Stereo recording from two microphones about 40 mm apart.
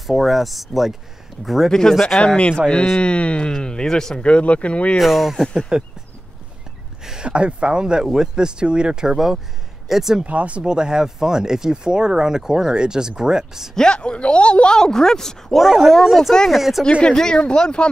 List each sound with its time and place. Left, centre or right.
0.0 s speech: centre
1.7 s speech: centre
2.1 s speech: left; by 4.2 s centre
4.2 s speech: left
4.9 s speech: centre
5.7 s speech: right
7.1 s speech: right
10.2 s speech: right
10.6 s speech: right
13.7 s speech: left; by 16.3 s centre
16.4 s speech: centre
17.0 s speech: centre